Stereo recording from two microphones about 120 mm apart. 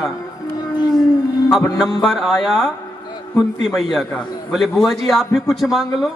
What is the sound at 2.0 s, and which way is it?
A man's voice, centre (ahead or behind).